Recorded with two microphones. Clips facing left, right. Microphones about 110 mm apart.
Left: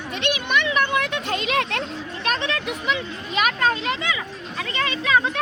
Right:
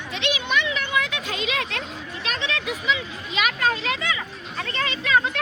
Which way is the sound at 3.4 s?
40° left (ahead or behind).